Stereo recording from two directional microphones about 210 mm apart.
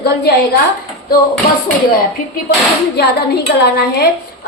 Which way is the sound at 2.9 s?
50° left (ahead or behind).